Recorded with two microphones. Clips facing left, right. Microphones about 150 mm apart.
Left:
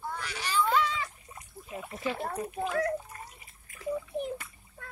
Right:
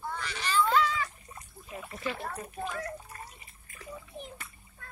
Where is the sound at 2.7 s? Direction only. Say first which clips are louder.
Left 11 dB; 70° left (ahead or behind).